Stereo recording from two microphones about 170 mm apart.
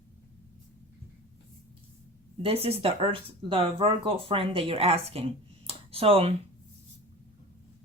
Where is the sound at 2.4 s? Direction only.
35° right (ahead or behind).